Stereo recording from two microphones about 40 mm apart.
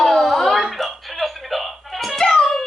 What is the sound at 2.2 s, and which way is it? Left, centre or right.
Music, centre.